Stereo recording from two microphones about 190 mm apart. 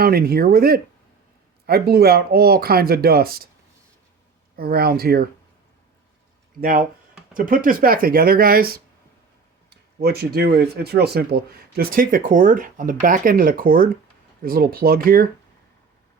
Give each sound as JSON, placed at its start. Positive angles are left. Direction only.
{"t": 0.0, "sound": "speech", "side_deg": -55}
{"t": 4.5, "sound": "speech", "side_deg": -55}
{"t": 6.6, "sound": "speech", "side_deg": -50}